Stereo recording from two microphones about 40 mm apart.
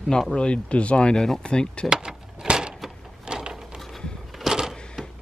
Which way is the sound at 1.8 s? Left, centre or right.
Centre.